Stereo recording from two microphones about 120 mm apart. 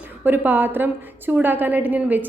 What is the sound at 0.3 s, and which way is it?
A woman's voice, 15° right (ahead or behind).